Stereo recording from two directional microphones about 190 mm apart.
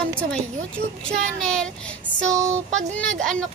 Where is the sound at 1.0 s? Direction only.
5° left (ahead or behind).